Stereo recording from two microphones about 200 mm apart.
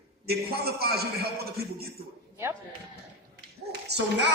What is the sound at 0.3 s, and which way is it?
A man's voice, 50° right (ahead or behind).